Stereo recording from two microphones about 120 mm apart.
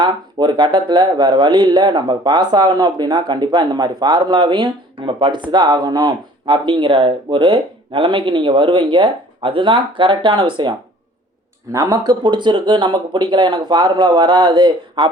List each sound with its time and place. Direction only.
0.0 s speech: 40° right (ahead or behind)
11.7 s speech: 30° right (ahead or behind)